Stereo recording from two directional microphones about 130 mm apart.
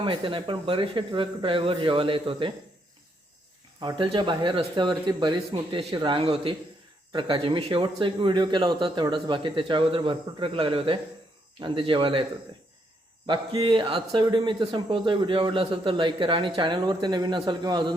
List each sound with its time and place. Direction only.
0.0 s speech: 40° right (ahead or behind)
3.8 s a man's voice: 40° right (ahead or behind)
13.2 s a man's voice: 35° right (ahead or behind)